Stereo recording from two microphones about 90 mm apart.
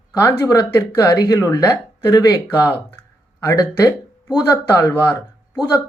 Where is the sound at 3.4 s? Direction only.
40° left (ahead or behind).